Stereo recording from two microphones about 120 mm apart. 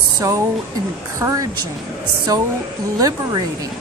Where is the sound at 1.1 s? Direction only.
25° right (ahead or behind).